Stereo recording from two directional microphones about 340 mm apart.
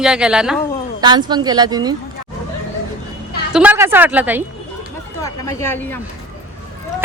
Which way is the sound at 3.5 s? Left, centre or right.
Centre.